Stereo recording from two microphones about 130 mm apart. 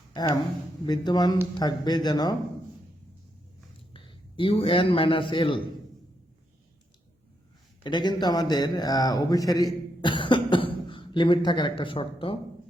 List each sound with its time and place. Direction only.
0.1 s speech: 30° left (ahead or behind)
3.9 s a man's voice: 40° left (ahead or behind)
7.9 s a man's voice: 35° left (ahead or behind)